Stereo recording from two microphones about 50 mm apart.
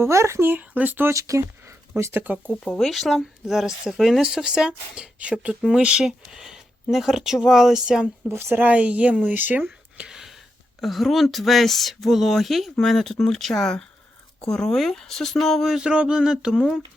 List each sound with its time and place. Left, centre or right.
0.0 s speech: right
0.4 s speech: right
1.0 s speech: right
2.1 s speech: right
2.7 s speech: centre
3.2 s speech: centre
8.3 s speech: right
8.6 s speech: right
9.3 s speech: right
10.1 s gasp: centre
10.8 s speech: centre
15.9 s speech: right